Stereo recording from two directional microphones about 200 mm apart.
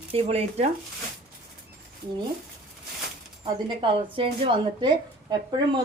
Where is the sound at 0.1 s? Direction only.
30° right (ahead or behind).